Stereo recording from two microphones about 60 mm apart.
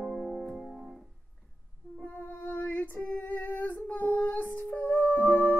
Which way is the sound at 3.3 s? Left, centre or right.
Left.